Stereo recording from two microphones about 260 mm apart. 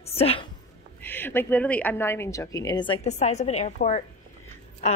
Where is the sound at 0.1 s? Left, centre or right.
Left.